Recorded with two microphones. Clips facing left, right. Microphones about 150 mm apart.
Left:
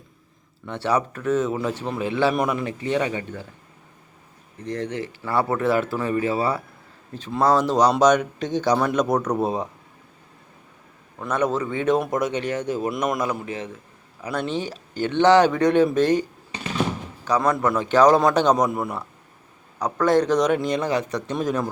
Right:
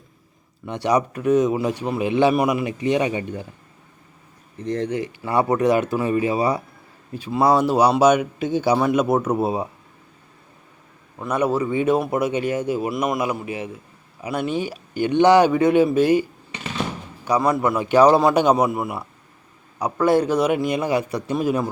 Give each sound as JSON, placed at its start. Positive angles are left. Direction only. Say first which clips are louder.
{"t": 0.6, "sound": "speech", "louder": "right 3 dB", "side_deg": -15}
{"t": 4.6, "sound": "speech", "louder": "right 4 dB", "side_deg": -25}
{"t": 4.9, "sound": "speech", "louder": "right 3 dB", "side_deg": -15}
{"t": 11.2, "sound": "speech", "louder": "right 2 dB", "side_deg": -10}
{"t": 17.2, "sound": "speech", "louder": "right 1 dB", "side_deg": -10}